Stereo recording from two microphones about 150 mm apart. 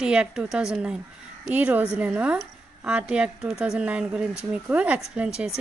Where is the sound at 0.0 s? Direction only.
5° right (ahead or behind).